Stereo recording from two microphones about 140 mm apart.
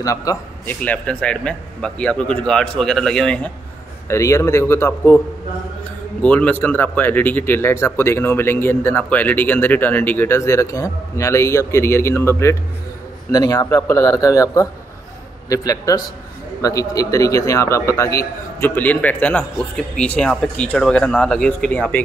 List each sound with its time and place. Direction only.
0.0 s a man's voice: 25° left (ahead or behind)
0.7 s a man's voice: 10° left (ahead or behind)
4.1 s a man's voice: 20° left (ahead or behind)
6.2 s a man's voice: 10° left (ahead or behind)